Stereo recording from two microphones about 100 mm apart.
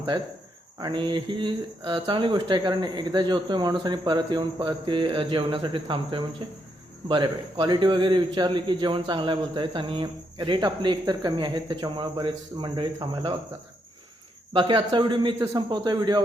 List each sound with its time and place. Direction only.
0.8 s a man's voice: 50° right (ahead or behind)
14.5 s a man's voice: 55° right (ahead or behind)